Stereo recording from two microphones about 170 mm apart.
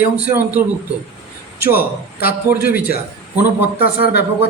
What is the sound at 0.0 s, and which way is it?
Speech, 10° right (ahead or behind).